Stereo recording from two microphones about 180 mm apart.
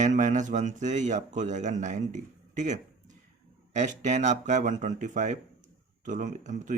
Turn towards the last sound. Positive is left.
turn(degrees=-45)  # may be behind; listen again after turning